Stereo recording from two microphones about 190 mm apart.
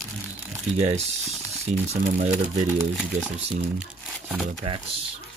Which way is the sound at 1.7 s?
35° right (ahead or behind).